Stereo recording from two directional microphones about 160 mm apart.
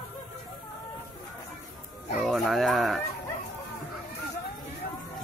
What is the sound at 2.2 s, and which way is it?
Speech, centre (ahead or behind).